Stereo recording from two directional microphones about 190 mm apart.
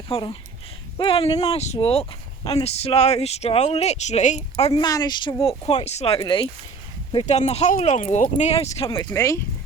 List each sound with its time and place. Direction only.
0.1 s speech: 25° left (ahead or behind)
9.0 s speech: 15° left (ahead or behind)